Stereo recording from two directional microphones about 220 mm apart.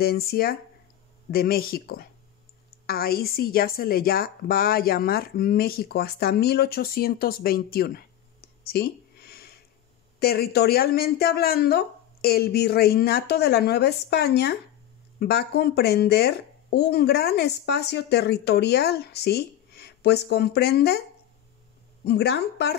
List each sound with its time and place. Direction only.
0.0 s a woman's voice: 45° left (ahead or behind)
22.0 s a woman's voice: 50° left (ahead or behind)